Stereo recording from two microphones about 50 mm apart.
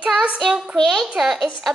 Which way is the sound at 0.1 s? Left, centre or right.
Centre.